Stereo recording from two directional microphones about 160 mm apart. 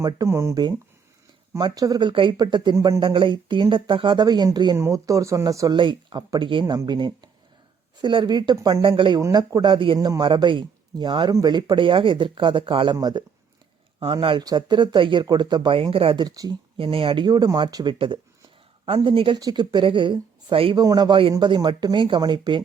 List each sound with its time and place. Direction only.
0.0 s speech: 20° right (ahead or behind)
3.0 s speech: 30° right (ahead or behind)
16.7 s speech: 35° right (ahead or behind)